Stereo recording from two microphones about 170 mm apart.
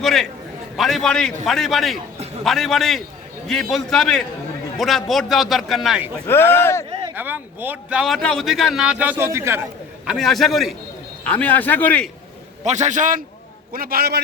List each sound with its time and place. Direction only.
0.0 s a man's voice: centre (ahead or behind)
6.2 s a man's voice: 15° left (ahead or behind)
7.2 s a man's voice: 10° right (ahead or behind)
10.1 s a man's voice: centre (ahead or behind)
12.6 s a man's voice: 45° right (ahead or behind)
13.7 s a man's voice: 60° right (ahead or behind)